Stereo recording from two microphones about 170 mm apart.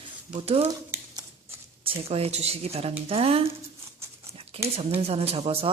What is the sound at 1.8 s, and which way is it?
Speech, 35° right (ahead or behind).